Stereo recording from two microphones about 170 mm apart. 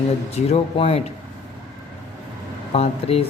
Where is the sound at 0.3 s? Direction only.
40° left (ahead or behind).